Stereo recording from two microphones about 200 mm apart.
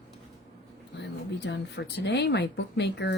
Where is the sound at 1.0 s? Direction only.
60° left (ahead or behind).